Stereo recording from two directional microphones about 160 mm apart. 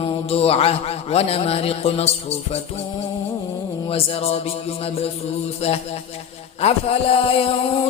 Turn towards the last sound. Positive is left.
turn(degrees=35)  # may be behind; listen again after turning